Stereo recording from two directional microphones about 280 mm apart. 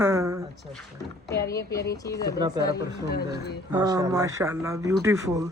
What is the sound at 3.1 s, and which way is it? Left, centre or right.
Speech, left.